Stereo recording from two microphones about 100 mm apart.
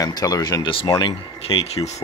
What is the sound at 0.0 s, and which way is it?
Speech, 40° left (ahead or behind).